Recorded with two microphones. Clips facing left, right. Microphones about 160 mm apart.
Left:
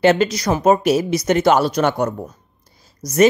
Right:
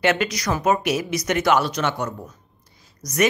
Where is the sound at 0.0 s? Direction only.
35° left (ahead or behind).